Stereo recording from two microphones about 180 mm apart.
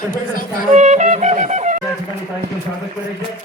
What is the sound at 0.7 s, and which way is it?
Wind instrument, 40° right (ahead or behind).